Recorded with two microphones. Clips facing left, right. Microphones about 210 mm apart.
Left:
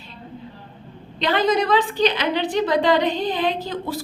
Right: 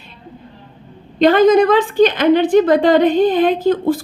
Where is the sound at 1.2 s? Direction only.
45° right (ahead or behind).